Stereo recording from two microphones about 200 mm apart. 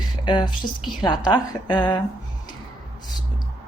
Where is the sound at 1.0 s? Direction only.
20° left (ahead or behind).